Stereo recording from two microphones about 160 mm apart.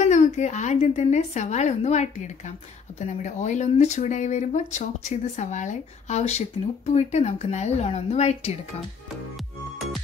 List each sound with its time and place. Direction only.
0.0 s speech: 45° left (ahead or behind)